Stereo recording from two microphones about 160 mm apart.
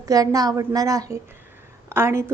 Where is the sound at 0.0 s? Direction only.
20° right (ahead or behind).